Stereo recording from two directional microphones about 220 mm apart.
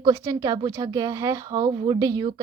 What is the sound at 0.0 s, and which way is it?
A woman's voice, 15° right (ahead or behind).